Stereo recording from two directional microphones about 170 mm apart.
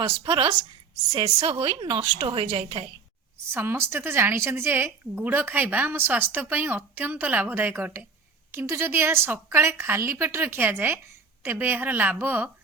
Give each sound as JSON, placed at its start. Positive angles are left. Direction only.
{"t": 0.0, "sound": "a woman's voice", "side_deg": -30}
{"t": 3.5, "sound": "a woman's voice", "side_deg": -15}